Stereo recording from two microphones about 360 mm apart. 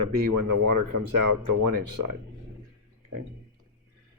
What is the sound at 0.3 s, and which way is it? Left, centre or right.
Speech, right.